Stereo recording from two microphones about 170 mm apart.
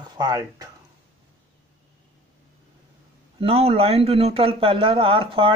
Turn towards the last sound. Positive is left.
turn(degrees=-30)  # may be behind; listen again after turning